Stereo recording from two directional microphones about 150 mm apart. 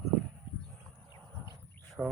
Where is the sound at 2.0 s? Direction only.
Centre (ahead or behind).